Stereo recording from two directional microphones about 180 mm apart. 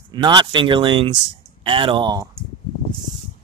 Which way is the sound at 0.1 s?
25° right (ahead or behind).